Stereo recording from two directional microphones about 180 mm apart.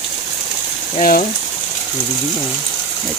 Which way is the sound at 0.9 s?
50° left (ahead or behind).